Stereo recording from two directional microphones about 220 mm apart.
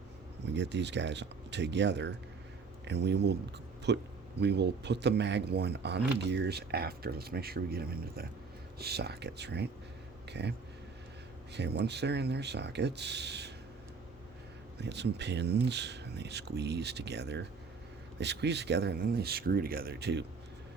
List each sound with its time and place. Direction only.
0.4 s speech: 50° right (ahead or behind)
11.5 s speech: 50° right (ahead or behind)
14.8 s speech: 50° right (ahead or behind)